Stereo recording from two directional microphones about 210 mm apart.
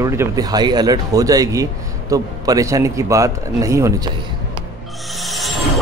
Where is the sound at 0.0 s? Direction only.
15° right (ahead or behind).